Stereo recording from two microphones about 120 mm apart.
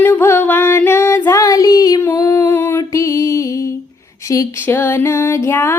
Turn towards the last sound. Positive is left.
turn(degrees=20)  # may be behind; listen again after turning